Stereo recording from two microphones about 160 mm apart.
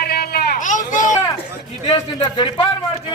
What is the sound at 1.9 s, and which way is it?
Speech, 30° left (ahead or behind).